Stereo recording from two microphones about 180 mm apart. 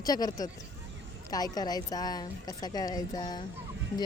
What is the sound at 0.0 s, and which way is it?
Speech, 20° left (ahead or behind).